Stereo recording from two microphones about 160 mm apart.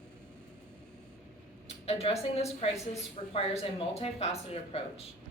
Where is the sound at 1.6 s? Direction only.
40° left (ahead or behind).